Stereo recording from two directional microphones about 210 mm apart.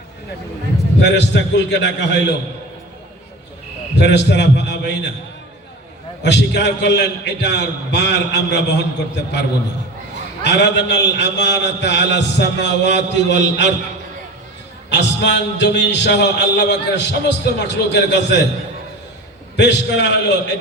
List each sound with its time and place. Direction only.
1.0 s a man's voice: 55° left (ahead or behind)
3.9 s a man's voice: 55° left (ahead or behind)
6.2 s a man's voice: 55° left (ahead or behind)
10.4 s a man's voice: 55° left (ahead or behind)
14.8 s a man's voice: 55° left (ahead or behind)
19.5 s a man's voice: 55° left (ahead or behind)